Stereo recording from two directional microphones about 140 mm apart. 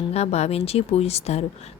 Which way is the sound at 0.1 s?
50° left (ahead or behind).